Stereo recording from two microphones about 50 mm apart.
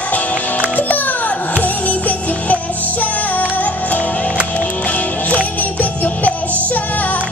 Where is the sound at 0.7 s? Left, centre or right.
Left.